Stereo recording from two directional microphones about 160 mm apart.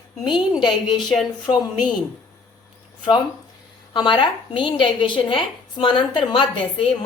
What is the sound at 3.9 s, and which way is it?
A woman's voice, 30° left (ahead or behind).